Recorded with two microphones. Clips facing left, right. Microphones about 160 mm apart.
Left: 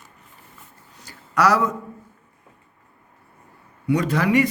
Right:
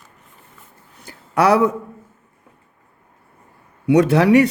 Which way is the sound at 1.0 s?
55° right (ahead or behind).